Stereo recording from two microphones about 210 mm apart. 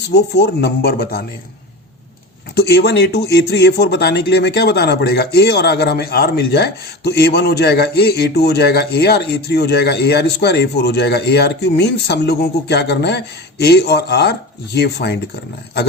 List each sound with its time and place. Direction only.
0.1 s speech: 55° left (ahead or behind)
2.6 s speech: 50° left (ahead or behind)